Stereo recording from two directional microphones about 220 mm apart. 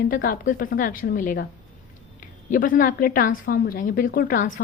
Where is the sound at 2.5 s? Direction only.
40° left (ahead or behind).